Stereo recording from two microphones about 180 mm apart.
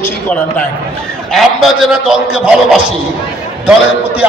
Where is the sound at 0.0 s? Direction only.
5° left (ahead or behind).